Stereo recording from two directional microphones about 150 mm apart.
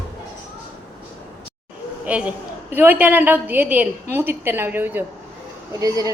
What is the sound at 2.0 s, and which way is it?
A woman's voice, 10° right (ahead or behind).